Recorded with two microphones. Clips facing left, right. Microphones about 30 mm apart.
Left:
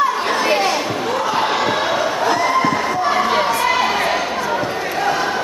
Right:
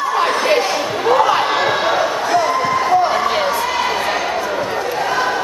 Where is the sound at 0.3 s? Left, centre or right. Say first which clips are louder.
Right 1 dB; centre.